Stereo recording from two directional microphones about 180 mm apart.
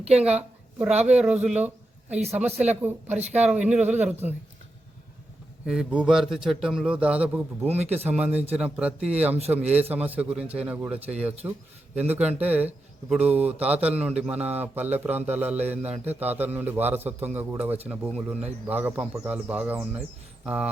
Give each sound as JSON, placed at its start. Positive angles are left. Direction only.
{"t": 0.9, "sound": "speech", "side_deg": -40}
{"t": 1.1, "sound": "a man's voice", "side_deg": -5}
{"t": 2.1, "sound": "speech", "side_deg": -35}
{"t": 2.4, "sound": "a man's voice", "side_deg": -10}
{"t": 3.1, "sound": "speech", "side_deg": -40}
{"t": 3.4, "sound": "a man's voice", "side_deg": -5}
{"t": 5.6, "sound": "a man's voice", "side_deg": -5}
{"t": 7.8, "sound": "speech", "side_deg": -35}
{"t": 8.0, "sound": "a man's voice", "side_deg": -10}